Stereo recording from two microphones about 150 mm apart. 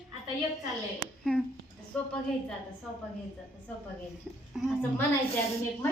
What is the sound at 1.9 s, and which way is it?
Speech, 5° left (ahead or behind).